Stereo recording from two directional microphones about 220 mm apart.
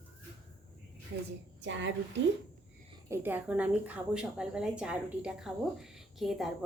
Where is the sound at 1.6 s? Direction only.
55° right (ahead or behind).